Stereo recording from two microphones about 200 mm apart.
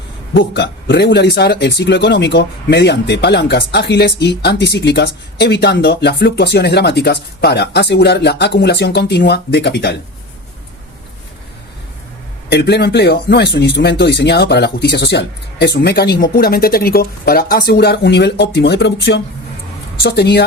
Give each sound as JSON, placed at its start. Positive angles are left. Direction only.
{"t": 0.3, "sound": "speech", "side_deg": 60}
{"t": 12.5, "sound": "speech", "side_deg": 55}